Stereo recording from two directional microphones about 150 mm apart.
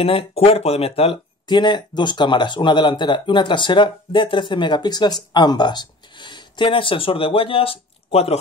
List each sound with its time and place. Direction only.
0.0 s speech: 40° left (ahead or behind)